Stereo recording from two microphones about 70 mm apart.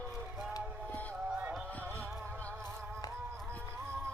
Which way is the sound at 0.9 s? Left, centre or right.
Left.